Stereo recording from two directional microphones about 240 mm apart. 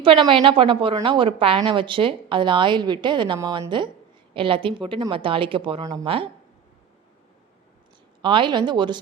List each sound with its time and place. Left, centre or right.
0.0 s a woman's voice: right
8.2 s a woman's voice: centre